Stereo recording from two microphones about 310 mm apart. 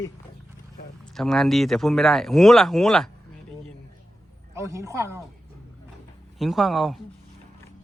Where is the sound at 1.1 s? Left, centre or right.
Centre.